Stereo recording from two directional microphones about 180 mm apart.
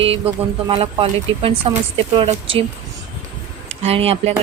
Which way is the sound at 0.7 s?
30° right (ahead or behind).